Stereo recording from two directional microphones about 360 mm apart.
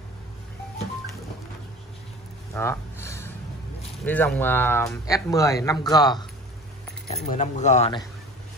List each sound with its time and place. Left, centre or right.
2.5 s a sound: centre
4.0 s speech: centre
7.2 s speech: centre